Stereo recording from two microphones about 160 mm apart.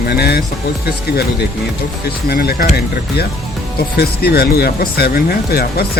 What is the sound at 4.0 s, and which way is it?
Speech, 80° left.